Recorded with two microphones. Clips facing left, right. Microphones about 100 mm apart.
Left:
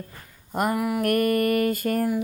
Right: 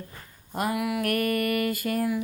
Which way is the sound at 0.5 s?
50° left (ahead or behind).